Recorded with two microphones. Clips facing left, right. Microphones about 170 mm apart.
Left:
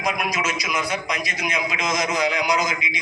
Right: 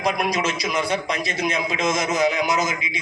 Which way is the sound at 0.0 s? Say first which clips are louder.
Right 3 dB; 30° right (ahead or behind).